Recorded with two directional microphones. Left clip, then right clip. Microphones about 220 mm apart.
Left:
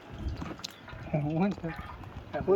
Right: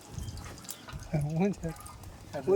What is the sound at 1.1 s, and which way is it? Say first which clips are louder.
Speech: left 1 dB; 60° right (ahead or behind).